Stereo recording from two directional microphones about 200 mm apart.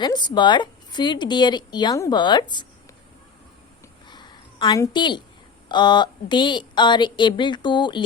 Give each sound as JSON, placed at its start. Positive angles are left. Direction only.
{"t": 0.0, "sound": "a woman's voice", "side_deg": 20}
{"t": 4.1, "sound": "a sound", "side_deg": 20}
{"t": 5.6, "sound": "a woman's voice", "side_deg": 20}